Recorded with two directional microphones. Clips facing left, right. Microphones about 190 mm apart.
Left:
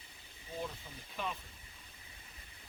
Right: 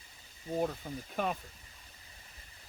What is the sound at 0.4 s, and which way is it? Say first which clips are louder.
Speech: right 9 dB; 50° right (ahead or behind).